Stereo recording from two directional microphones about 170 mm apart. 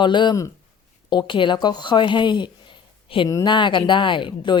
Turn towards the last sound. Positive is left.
turn(degrees=30)  # may be behind; listen again after turning